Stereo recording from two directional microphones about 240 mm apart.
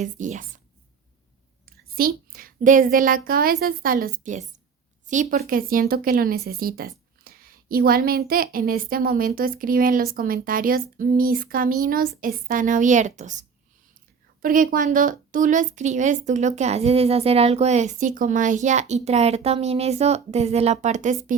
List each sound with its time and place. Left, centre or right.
0.0 s a woman's voice: right
1.6 s a woman's voice: right
14.4 s a woman's voice: right